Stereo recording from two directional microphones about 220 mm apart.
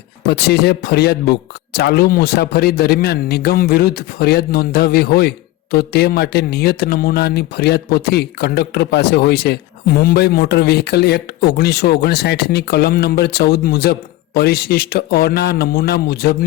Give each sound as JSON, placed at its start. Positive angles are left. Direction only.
{"t": 0.3, "sound": "speech", "side_deg": 50}